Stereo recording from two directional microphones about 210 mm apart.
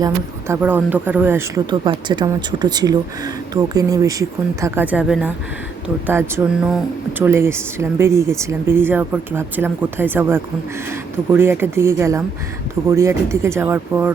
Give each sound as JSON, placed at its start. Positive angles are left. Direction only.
{"t": 0.0, "sound": "speech", "side_deg": -10}